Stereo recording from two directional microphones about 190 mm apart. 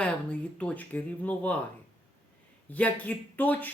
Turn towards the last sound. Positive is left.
turn(degrees=10)  # may be behind; listen again after turning